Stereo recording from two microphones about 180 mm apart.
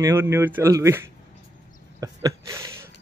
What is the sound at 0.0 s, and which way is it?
Speech, 15° right (ahead or behind).